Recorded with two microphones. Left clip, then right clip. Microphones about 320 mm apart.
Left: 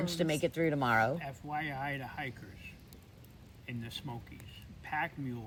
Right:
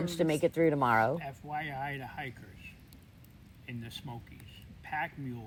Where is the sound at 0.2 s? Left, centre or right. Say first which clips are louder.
Right 5 dB; centre.